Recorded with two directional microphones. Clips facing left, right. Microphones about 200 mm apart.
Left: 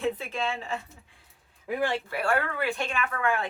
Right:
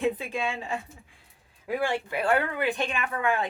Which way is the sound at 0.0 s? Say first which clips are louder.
Right 2 dB; 15° right (ahead or behind).